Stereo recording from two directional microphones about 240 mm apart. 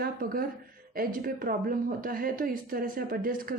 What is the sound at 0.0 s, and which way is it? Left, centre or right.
Speech, right.